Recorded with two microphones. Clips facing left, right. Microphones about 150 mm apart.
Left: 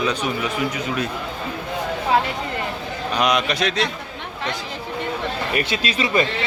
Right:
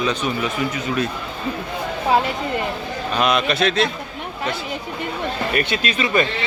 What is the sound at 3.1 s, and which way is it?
Speech, 15° left (ahead or behind).